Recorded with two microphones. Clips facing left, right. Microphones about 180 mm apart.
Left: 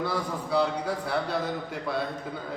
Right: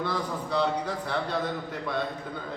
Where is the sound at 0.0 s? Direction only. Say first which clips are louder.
Left 1 dB; 10° left (ahead or behind).